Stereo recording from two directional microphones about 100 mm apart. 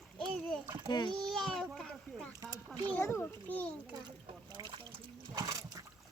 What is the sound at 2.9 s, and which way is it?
Speech, 25° left (ahead or behind).